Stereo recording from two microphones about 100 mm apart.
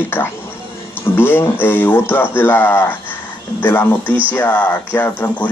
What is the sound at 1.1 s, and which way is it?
Speech, 25° left (ahead or behind).